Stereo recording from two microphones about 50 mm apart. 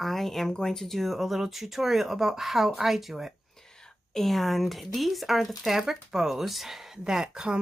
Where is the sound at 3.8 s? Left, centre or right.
Centre.